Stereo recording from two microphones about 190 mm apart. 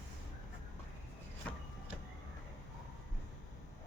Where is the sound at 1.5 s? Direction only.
5° left (ahead or behind).